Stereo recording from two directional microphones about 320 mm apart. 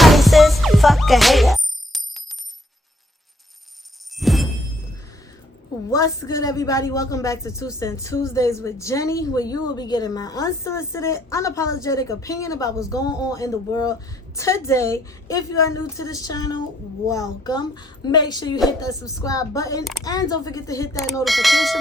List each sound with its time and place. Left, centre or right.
0.0 s music: centre
4.2 s a sound: centre
5.9 s a man's voice: centre